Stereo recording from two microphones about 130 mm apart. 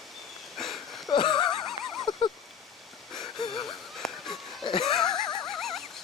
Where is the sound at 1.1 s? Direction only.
35° left (ahead or behind).